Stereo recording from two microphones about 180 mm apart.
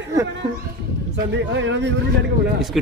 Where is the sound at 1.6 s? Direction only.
90° right.